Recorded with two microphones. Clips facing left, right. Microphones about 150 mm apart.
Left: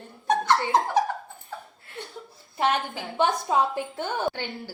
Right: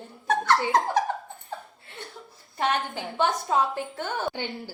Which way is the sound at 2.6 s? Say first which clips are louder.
Left 1 dB; 10° left (ahead or behind).